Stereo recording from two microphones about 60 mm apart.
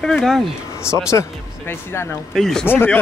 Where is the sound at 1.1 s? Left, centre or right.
Left.